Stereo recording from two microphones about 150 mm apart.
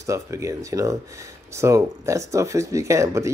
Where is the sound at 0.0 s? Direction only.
20° right (ahead or behind).